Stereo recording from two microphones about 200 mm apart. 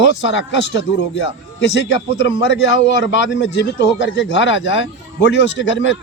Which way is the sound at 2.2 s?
65° left (ahead or behind).